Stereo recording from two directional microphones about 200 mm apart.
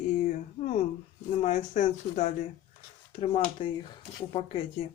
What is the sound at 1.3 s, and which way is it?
Speech, 40° left (ahead or behind).